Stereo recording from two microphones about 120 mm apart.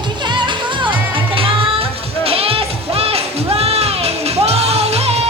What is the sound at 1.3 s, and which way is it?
Music, 50° right (ahead or behind).